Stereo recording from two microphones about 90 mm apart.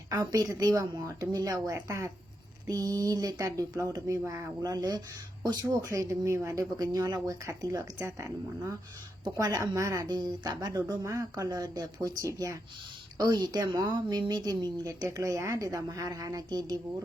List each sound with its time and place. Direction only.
0.1 s a woman's voice: 45° right (ahead or behind)
5.8 s speech: 35° right (ahead or behind)
9.2 s speech: 45° right (ahead or behind)
10.1 s a woman's voice: 50° right (ahead or behind)
11.0 s speech: 35° right (ahead or behind)
13.1 s a woman's voice: 50° right (ahead or behind)